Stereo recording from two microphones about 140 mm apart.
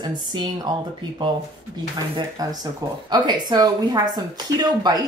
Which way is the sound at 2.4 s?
25° right (ahead or behind).